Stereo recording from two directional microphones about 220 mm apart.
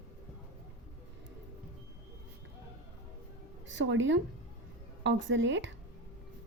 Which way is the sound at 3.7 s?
55° right (ahead or behind).